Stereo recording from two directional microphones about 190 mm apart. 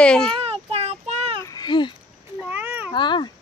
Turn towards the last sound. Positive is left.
turn(degrees=25)  # may be behind; listen again after turning